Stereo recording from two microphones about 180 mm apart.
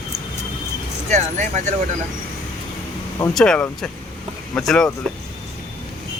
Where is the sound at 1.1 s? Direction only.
40° right (ahead or behind).